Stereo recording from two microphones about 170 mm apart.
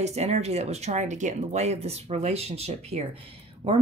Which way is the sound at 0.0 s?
40° right (ahead or behind).